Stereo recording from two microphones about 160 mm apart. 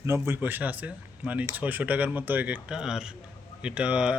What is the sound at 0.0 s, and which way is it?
Speech, 15° right (ahead or behind).